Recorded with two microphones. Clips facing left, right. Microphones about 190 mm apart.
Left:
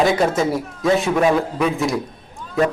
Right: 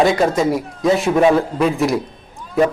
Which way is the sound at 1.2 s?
25° right (ahead or behind).